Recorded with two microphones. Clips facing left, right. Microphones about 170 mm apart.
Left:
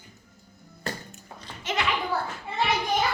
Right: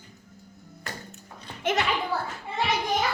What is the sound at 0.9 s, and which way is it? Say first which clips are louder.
Music: left 5 dB; 30° left (ahead or behind).